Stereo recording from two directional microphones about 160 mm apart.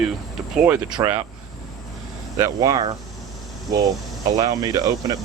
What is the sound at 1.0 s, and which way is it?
Speech, 20° right (ahead or behind).